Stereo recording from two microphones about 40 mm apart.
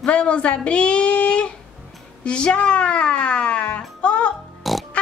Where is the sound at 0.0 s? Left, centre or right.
Left.